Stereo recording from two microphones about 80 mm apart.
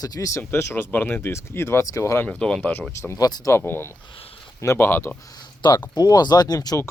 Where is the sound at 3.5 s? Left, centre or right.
Left.